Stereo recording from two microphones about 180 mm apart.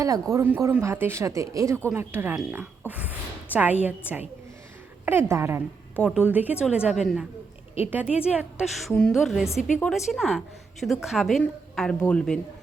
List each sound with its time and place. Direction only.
0.0 s a woman's voice: 15° right (ahead or behind)
8.9 s a woman's voice: 5° left (ahead or behind)